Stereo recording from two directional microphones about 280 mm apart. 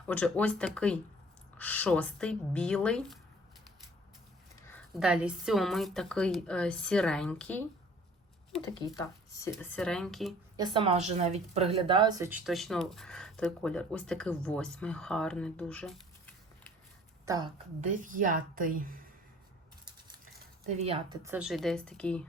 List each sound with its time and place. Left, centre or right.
0.1 s a woman's voice: centre
4.7 s a woman's voice: centre
9.0 s a woman's voice: centre
10.6 s a woman's voice: centre
17.2 s a woman's voice: centre
17.7 s a woman's voice: right
20.7 s a woman's voice: right
21.2 s a woman's voice: centre